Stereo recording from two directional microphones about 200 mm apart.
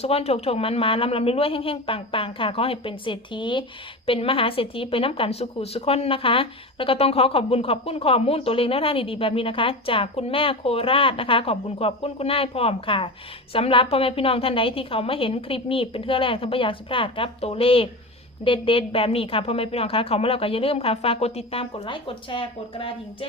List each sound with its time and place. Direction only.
0.0 s a woman's voice: 30° left (ahead or behind)